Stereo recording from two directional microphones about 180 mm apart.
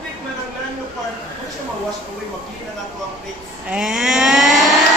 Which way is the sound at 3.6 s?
5° right (ahead or behind).